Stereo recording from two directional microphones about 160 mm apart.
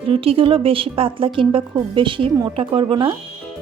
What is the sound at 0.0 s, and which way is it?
Speech, 35° right (ahead or behind).